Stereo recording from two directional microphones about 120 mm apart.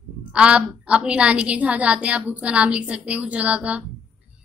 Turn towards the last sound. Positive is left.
turn(degrees=-10)  # may be behind; listen again after turning